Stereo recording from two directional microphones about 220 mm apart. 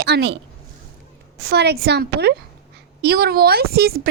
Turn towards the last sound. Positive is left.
turn(degrees=-45)  # may be behind; listen again after turning